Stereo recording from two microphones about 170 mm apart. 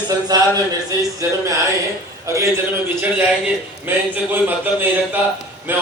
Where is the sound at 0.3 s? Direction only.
20° right (ahead or behind).